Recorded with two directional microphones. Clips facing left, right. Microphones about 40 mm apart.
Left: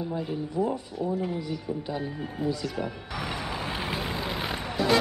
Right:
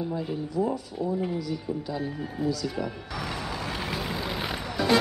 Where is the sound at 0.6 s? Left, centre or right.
Left.